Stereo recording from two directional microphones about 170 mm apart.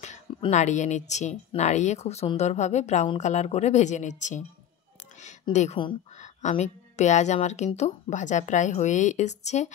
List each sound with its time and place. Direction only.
0.5 s speech: 45° left (ahead or behind)
5.5 s speech: 40° left (ahead or behind)